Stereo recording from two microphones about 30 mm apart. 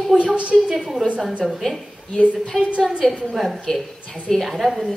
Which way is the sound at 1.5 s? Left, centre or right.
Centre.